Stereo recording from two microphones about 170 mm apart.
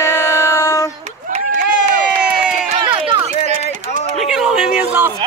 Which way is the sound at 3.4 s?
40° left (ahead or behind).